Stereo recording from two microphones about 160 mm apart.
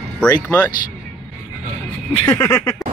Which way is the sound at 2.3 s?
20° left (ahead or behind).